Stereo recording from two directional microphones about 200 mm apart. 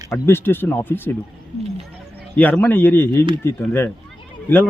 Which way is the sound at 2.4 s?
5° left (ahead or behind).